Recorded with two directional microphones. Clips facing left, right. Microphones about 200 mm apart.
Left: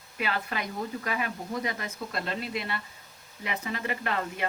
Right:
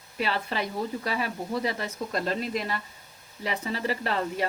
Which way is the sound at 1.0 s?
30° right (ahead or behind).